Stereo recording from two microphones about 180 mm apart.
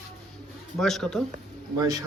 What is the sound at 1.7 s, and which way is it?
Speech, 20° right (ahead or behind).